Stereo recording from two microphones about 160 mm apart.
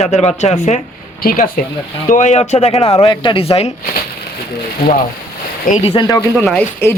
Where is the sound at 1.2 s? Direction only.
70° left (ahead or behind).